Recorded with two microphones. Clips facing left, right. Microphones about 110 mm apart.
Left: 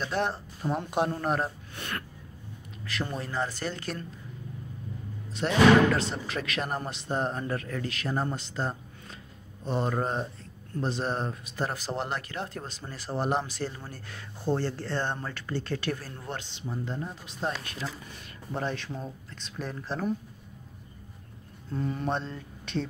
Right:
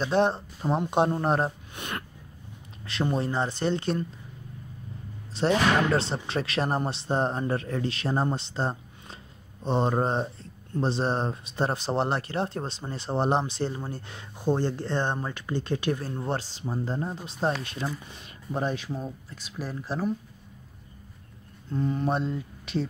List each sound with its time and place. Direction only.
0.0 s speech: 25° right (ahead or behind)
1.8 s snort: 20° right (ahead or behind)
2.9 s speech: 25° right (ahead or behind)
5.3 s speech: 30° right (ahead or behind); by 20.2 s 5° right (ahead or behind)
21.6 s speech: centre (ahead or behind)